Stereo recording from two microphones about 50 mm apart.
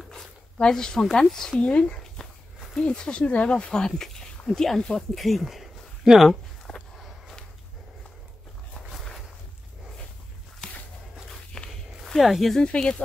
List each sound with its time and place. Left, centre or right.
0.6 s speech: centre
1.6 s speech: left; by 6.3 s centre
6.7 s a sound: centre
11.6 s walk: centre
12.0 s speech: centre
12.5 s speech: centre